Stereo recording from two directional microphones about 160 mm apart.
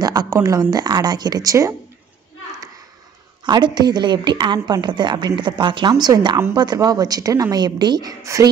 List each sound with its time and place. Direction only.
0.0 s a woman's voice: 25° right (ahead or behind)
3.4 s a woman's voice: 25° right (ahead or behind)